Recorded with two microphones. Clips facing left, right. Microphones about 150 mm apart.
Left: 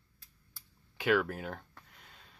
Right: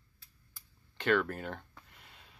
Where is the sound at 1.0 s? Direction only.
5° left (ahead or behind).